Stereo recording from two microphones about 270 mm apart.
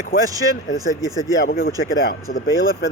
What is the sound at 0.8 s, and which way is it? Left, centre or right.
Speech, centre.